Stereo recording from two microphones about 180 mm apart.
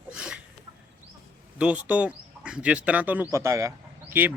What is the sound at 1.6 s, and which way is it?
Speech, 5° right (ahead or behind).